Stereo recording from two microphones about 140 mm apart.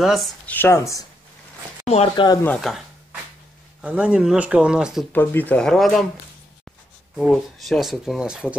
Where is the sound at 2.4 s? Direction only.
10° left (ahead or behind).